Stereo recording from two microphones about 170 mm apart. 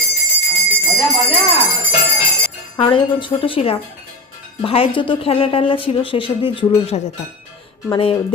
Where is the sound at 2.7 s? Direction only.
30° left (ahead or behind).